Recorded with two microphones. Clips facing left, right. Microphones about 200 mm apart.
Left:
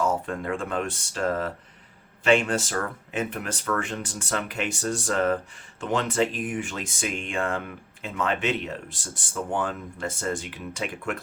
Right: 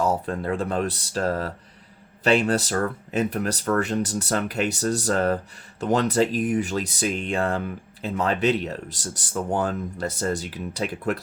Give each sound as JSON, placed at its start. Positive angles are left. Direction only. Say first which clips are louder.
{"t": 0.1, "sound": "speech", "louder": "right 2 dB", "side_deg": -35}